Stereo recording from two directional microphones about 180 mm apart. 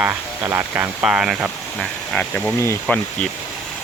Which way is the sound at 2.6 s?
15° left (ahead or behind).